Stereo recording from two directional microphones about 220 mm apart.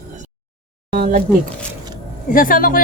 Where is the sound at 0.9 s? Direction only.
40° right (ahead or behind).